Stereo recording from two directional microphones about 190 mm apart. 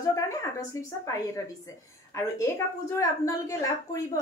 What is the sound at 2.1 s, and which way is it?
A woman's voice, 15° left (ahead or behind).